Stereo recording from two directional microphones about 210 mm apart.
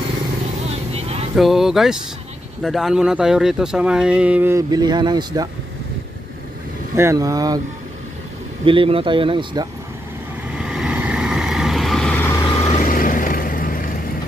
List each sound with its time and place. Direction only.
0.7 s vehicle: 30° right (ahead or behind)
1.3 s speech: centre (ahead or behind); by 5.5 s 20° right (ahead or behind)
7.0 s speech: 15° right (ahead or behind)
8.6 s speech: 25° right (ahead or behind)
10.6 s vehicle: 5° right (ahead or behind)
12.4 s vehicle: 20° left (ahead or behind)
12.8 s vehicle: 40° left (ahead or behind)